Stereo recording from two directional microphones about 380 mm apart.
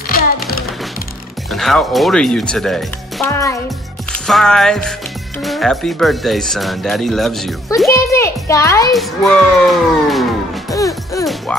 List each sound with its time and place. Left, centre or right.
0.1 s music: left
1.5 s speech: centre
10.7 s music: centre